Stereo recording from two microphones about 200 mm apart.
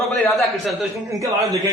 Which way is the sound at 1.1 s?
15° right (ahead or behind).